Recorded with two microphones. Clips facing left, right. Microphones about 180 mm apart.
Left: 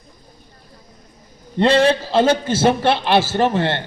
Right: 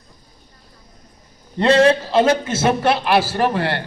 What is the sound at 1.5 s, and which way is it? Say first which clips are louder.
A man's voice: right 1 dB; 30° left (ahead or behind).